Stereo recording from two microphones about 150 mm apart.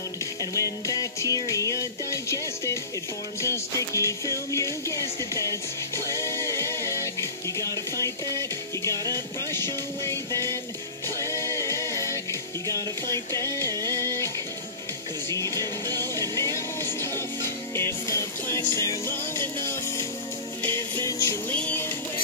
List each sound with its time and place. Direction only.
0.4 s music: 20° left (ahead or behind)